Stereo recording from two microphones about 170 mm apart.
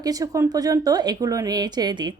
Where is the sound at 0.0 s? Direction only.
20° right (ahead or behind).